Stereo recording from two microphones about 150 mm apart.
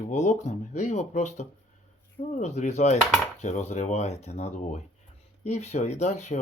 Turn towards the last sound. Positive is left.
turn(degrees=50)  # may be behind; listen again after turning